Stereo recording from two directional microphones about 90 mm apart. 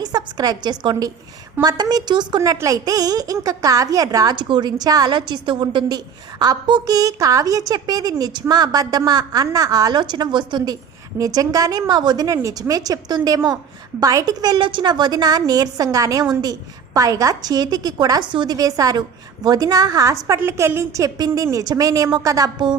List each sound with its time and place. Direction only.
0.0 s a woman's voice: 50° right (ahead or behind)
2.6 s a woman's voice: 40° right (ahead or behind)
4.4 s a woman's voice: 55° right (ahead or behind)
6.9 s a woman's voice: 40° right (ahead or behind); by 10.8 s 55° right (ahead or behind)
11.2 s a woman's voice: 40° right (ahead or behind)
14.7 s a woman's voice: 60° right (ahead or behind)
18.5 s a woman's voice: 40° right (ahead or behind)